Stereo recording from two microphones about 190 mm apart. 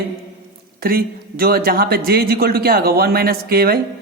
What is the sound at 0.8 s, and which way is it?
Speech, 50° right (ahead or behind).